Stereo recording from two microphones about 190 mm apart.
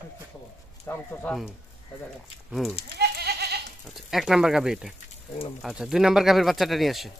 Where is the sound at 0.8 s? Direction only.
10° left (ahead or behind).